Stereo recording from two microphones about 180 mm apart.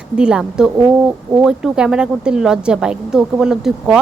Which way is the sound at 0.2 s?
5° right (ahead or behind).